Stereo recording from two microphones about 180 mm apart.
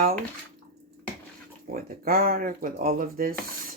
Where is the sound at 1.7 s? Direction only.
55° right (ahead or behind).